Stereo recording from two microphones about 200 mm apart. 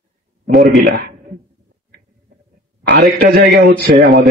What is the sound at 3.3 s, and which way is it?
Speech, 50° right (ahead or behind).